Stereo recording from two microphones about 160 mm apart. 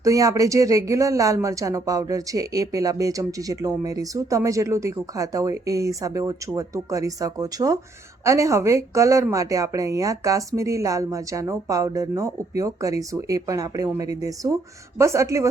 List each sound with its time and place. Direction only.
0.0 s speech: 20° right (ahead or behind)